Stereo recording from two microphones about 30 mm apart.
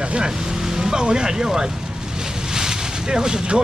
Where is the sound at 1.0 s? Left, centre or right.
Right.